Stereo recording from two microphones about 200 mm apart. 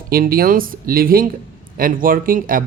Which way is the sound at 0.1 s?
50° right (ahead or behind).